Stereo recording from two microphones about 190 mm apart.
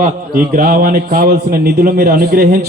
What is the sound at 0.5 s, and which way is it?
A man's voice, 50° right (ahead or behind).